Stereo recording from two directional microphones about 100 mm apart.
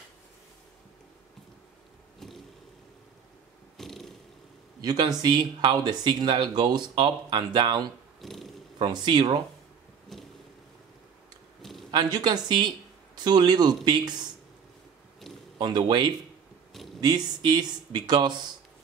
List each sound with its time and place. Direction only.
2.1 s vehicle: centre (ahead or behind)
3.7 s purr: centre (ahead or behind)
4.8 s speech: 45° right (ahead or behind)
8.2 s purr: centre (ahead or behind)
8.8 s speech: 50° right (ahead or behind)
10.1 s vehicle: centre (ahead or behind)
11.9 s speech: 45° right (ahead or behind)
15.5 s a man's voice: 50° right (ahead or behind)